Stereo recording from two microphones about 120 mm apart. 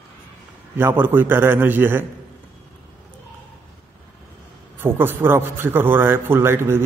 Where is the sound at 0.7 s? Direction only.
15° right (ahead or behind).